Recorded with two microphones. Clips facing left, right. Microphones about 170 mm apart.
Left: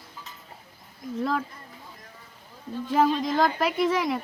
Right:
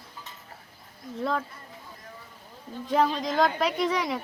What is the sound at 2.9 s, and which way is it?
Speech, centre (ahead or behind).